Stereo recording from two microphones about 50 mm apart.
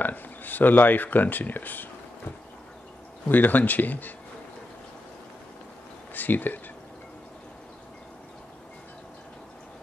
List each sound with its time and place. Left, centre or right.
0.0 s speech: left
3.3 s speech: left
6.1 s speech: left